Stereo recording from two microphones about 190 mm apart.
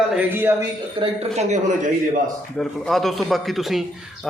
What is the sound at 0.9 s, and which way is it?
Speech, 35° right (ahead or behind).